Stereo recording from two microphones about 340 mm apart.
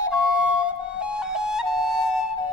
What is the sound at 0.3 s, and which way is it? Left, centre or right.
Flute, centre.